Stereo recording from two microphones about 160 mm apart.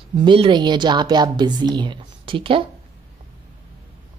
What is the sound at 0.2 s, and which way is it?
Speech, 30° right (ahead or behind).